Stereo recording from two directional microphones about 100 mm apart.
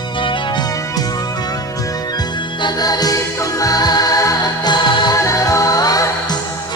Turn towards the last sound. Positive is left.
turn(degrees=40)  # may be behind; listen again after turning